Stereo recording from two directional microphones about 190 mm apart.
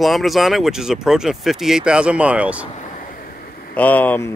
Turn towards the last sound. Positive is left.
turn(degrees=10)  # may be behind; listen again after turning